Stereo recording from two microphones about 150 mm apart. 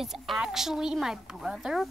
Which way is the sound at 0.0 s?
Centre (ahead or behind).